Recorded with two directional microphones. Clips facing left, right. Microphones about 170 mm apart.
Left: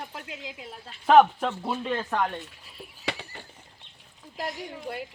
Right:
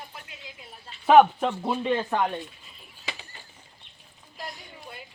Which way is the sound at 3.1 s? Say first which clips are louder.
Left 6 dB; 60° left (ahead or behind).